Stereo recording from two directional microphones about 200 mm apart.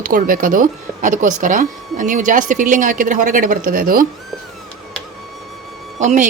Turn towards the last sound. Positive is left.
turn(degrees=-40)  # may be behind; listen again after turning